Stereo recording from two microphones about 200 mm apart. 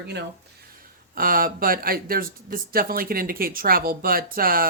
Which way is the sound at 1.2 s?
45° right (ahead or behind).